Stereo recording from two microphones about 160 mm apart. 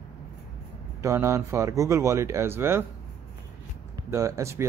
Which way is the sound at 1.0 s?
20° right (ahead or behind).